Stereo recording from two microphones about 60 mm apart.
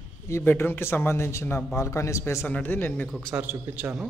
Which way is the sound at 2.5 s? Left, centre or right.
Left.